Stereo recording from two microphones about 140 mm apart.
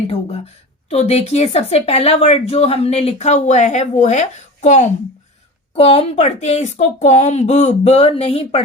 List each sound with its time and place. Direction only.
0.1 s a woman's voice: 45° left (ahead or behind)
5.7 s a woman's voice: 45° left (ahead or behind)